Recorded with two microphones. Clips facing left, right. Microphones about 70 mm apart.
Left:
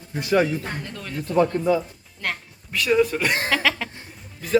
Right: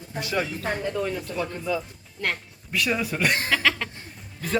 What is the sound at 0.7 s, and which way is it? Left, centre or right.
Speech, centre.